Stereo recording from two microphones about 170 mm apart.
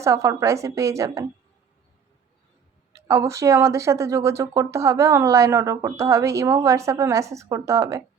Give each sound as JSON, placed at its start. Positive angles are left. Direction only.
{"t": 0.0, "sound": "speech", "side_deg": -15}
{"t": 2.9, "sound": "speech", "side_deg": -15}